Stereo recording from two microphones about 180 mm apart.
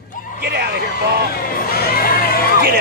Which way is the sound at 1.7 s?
55° left (ahead or behind).